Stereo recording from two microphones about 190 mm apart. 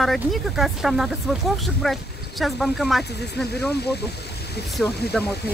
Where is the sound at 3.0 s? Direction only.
60° left (ahead or behind).